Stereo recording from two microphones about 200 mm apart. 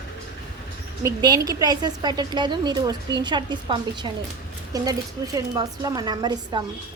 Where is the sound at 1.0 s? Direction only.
20° right (ahead or behind).